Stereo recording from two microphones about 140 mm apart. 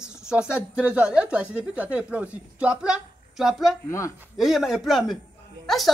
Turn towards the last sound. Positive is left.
turn(degrees=0)  # may be behind; listen again after turning